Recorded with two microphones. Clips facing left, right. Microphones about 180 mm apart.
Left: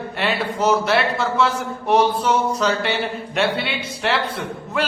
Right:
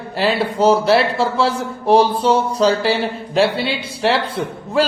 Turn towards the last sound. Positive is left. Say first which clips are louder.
# right 5 dB
turn(degrees=-30)  # may be behind; listen again after turning